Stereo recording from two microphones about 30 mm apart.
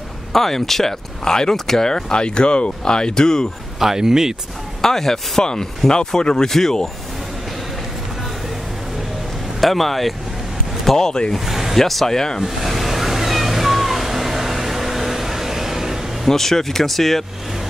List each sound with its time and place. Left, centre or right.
0.3 s speech: centre
1.2 s speech: left
2.1 s speech: left
3.8 s speech: centre
4.8 s speech: centre
5.4 s speech: left
9.6 s speech: centre
11.0 s speech: left
11.3 s a sound: centre
11.7 s speech: centre
12.4 s a sound: centre
16.3 s speech: centre